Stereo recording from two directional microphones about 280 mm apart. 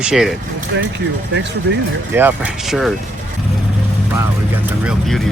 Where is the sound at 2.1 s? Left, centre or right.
Centre.